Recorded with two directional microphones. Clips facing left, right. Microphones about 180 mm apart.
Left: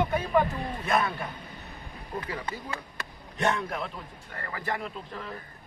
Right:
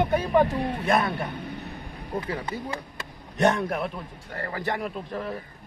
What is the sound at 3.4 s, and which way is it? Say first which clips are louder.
A man's voice: right 6 dB; 45° right (ahead or behind).